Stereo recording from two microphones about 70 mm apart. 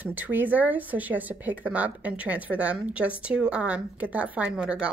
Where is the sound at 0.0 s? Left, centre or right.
Right.